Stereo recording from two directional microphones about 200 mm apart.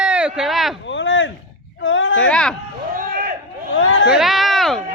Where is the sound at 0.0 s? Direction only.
5° right (ahead or behind).